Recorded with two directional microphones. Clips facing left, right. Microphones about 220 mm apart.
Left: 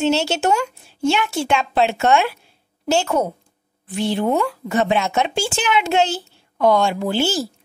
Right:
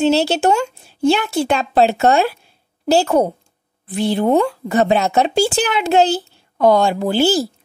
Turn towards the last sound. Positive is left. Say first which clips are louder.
# right 5 dB
turn(degrees=-35)  # may be behind; listen again after turning